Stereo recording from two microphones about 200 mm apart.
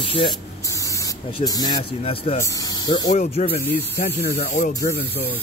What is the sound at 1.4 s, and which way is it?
Speech, 20° left (ahead or behind).